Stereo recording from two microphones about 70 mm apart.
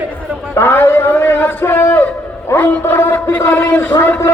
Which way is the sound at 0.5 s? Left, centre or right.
Left.